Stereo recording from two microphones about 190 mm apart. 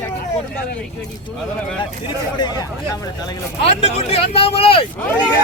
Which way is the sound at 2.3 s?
20° left (ahead or behind).